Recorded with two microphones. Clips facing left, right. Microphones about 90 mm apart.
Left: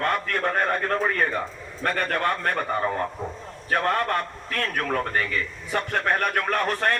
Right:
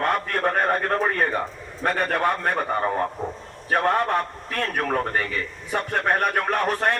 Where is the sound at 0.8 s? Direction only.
35° right (ahead or behind).